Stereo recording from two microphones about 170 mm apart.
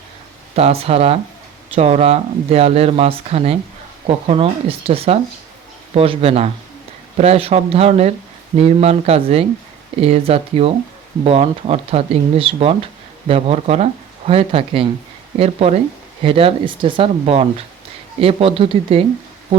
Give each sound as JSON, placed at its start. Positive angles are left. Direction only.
{"t": 0.5, "sound": "speech", "side_deg": -35}